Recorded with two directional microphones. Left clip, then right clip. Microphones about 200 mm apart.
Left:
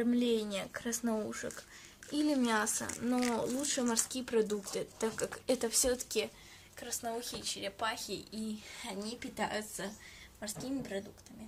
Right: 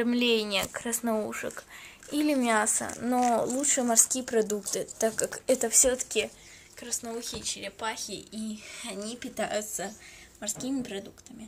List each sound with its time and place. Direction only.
0.0 s speech: 10° left (ahead or behind)
5.9 s speech: 25° left (ahead or behind)
6.8 s a woman's voice: 10° left (ahead or behind)